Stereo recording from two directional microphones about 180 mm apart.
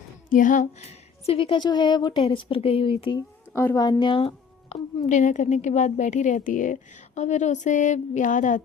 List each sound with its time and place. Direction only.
0.3 s speech: 45° left (ahead or behind); by 3.2 s 30° left (ahead or behind)
3.2 s a woman's voice: 15° left (ahead or behind); by 8.6 s 45° left (ahead or behind)